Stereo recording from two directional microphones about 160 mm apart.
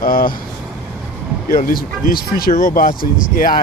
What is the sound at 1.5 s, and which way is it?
Speech, 65° left (ahead or behind).